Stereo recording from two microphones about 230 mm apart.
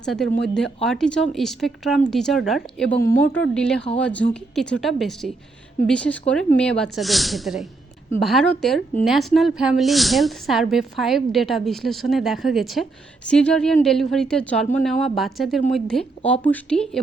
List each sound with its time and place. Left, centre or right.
0.0 s a woman's voice: centre